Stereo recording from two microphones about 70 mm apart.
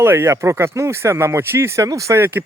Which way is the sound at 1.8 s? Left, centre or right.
Right.